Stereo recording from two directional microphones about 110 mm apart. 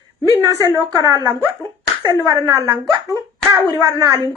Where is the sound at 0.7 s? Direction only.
30° right (ahead or behind).